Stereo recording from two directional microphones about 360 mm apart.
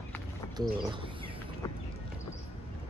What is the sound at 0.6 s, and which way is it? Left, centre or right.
Speech, centre.